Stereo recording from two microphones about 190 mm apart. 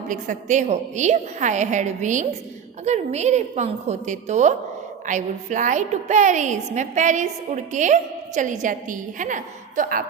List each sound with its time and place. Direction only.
0.1 s a woman's voice: 40° right (ahead or behind)